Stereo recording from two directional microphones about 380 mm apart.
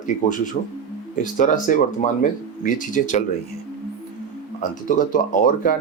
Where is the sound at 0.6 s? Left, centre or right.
Left.